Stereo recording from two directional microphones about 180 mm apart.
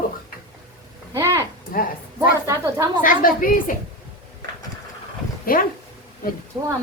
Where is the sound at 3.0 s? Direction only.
50° left (ahead or behind).